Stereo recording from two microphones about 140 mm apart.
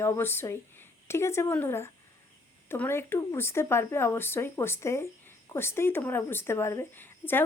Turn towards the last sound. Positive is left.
turn(degrees=15)  # may be behind; listen again after turning